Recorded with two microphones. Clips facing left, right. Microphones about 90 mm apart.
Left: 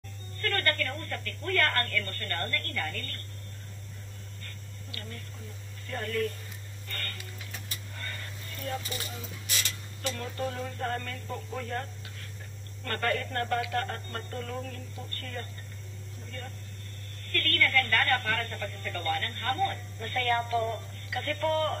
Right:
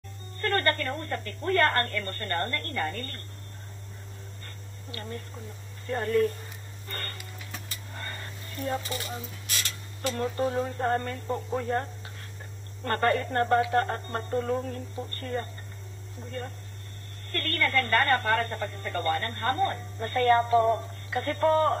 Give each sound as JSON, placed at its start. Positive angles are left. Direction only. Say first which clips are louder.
{"t": 0.4, "sound": "speech", "louder": "right 4 dB", "side_deg": -30}
{"t": 4.9, "sound": "speech", "louder": "right 7 dB", "side_deg": -30}
{"t": 7.9, "sound": "a sound", "louder": "right 3 dB", "side_deg": -30}
{"t": 10.1, "sound": "speech", "louder": "right 9 dB", "side_deg": -30}